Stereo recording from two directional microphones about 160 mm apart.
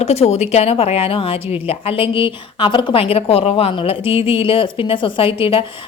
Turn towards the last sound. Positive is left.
turn(degrees=35)  # may be behind; listen again after turning